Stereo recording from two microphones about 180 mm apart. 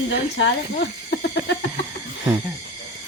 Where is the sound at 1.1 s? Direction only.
75° left (ahead or behind).